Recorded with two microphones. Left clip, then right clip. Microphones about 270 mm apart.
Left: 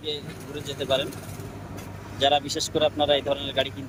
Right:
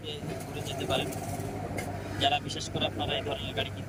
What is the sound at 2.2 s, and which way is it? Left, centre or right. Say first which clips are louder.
Speech: left 7 dB; left.